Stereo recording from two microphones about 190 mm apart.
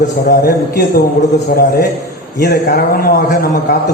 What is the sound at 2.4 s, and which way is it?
Speech, 55° left (ahead or behind).